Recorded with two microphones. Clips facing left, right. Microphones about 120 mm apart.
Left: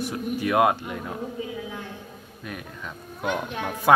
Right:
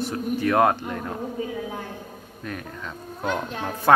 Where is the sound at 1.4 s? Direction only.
40° right (ahead or behind).